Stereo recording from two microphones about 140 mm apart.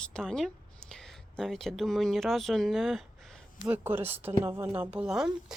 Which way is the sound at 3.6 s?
15° right (ahead or behind).